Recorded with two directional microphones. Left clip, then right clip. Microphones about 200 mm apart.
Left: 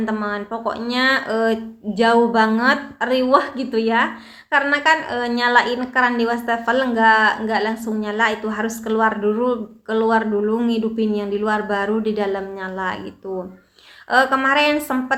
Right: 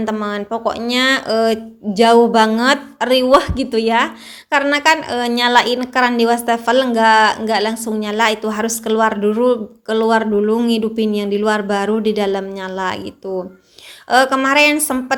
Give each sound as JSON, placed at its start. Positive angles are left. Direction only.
{"t": 0.1, "sound": "a woman's voice", "side_deg": -45}
{"t": 14.1, "sound": "a woman's voice", "side_deg": -50}